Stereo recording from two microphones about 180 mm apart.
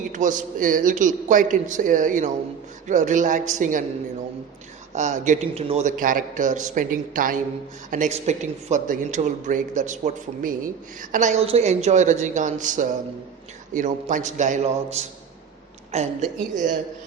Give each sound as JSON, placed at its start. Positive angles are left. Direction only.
{"t": 0.1, "sound": "speech", "side_deg": -45}
{"t": 4.9, "sound": "a woman's voice", "side_deg": -45}